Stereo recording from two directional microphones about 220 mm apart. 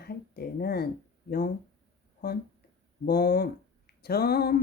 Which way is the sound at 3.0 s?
45° left (ahead or behind).